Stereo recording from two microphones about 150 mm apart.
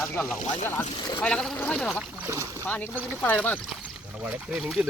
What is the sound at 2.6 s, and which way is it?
Speech, 10° left (ahead or behind).